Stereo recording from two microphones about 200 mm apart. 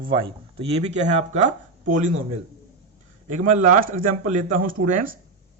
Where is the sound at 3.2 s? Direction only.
40° right (ahead or behind).